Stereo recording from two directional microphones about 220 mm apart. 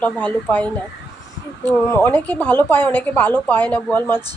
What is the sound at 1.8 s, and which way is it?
A woman's voice, 10° left (ahead or behind).